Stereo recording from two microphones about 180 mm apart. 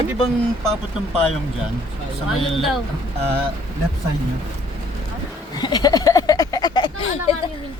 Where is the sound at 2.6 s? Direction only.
Centre (ahead or behind).